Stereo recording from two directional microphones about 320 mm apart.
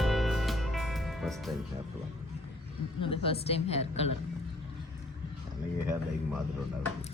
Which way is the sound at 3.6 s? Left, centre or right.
Centre.